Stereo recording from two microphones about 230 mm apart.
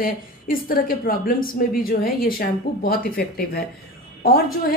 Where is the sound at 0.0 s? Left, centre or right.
Left.